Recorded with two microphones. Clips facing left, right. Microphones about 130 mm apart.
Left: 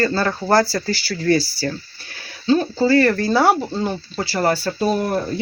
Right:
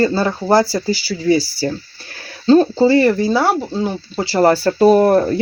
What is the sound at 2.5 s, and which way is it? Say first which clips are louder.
Speech: right 7 dB; 35° right (ahead or behind).